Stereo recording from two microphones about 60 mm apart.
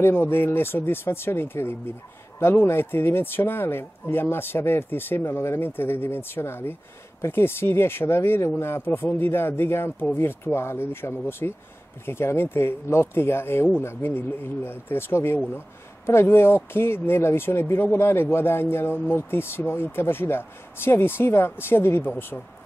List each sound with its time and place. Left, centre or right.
0.0 s speech: left